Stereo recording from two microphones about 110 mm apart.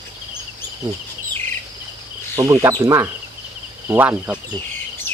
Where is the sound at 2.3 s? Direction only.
35° right (ahead or behind); by 4.3 s 20° right (ahead or behind).